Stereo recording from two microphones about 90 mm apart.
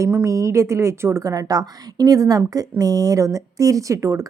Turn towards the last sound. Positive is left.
turn(degrees=-35)  # may be behind; listen again after turning